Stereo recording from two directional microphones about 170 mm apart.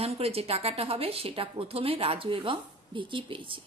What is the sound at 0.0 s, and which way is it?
A woman's voice, 35° right (ahead or behind).